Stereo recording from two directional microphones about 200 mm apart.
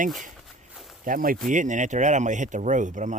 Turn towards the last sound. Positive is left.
turn(degrees=-40)  # may be behind; listen again after turning